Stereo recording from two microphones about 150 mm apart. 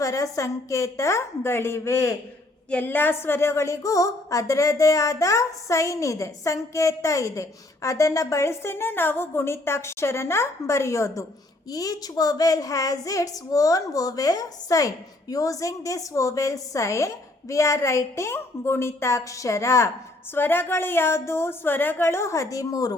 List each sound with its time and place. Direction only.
0.0 s a woman's voice: 20° left (ahead or behind)